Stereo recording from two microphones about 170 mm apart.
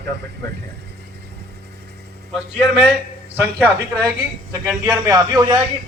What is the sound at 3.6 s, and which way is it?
A man's voice, 15° right (ahead or behind).